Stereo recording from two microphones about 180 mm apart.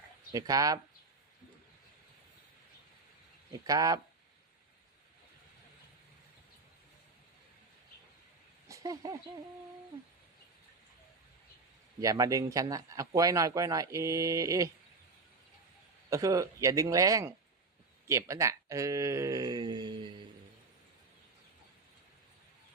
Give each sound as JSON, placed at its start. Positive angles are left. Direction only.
{"t": 0.3, "sound": "speech", "side_deg": -20}
{"t": 3.5, "sound": "speech", "side_deg": -20}
{"t": 8.6, "sound": "a sound", "side_deg": -20}
{"t": 11.9, "sound": "speech", "side_deg": -20}
{"t": 16.0, "sound": "speech", "side_deg": -20}